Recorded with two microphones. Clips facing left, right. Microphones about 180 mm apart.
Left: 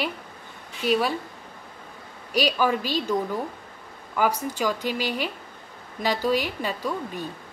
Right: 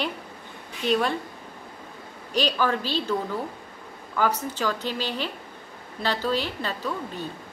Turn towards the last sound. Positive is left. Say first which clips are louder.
# left 1 dB
turn(degrees=10)  # may be behind; listen again after turning